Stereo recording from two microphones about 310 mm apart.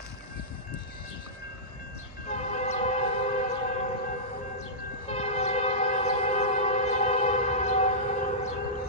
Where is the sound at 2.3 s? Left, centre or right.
Left.